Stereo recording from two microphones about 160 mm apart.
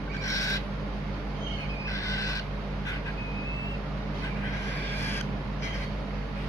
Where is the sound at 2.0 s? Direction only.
20° left (ahead or behind).